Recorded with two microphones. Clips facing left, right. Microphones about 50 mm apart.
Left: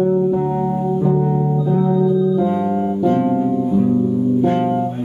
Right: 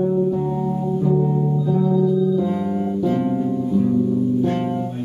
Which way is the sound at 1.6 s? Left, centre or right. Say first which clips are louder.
Left 2 dB; left.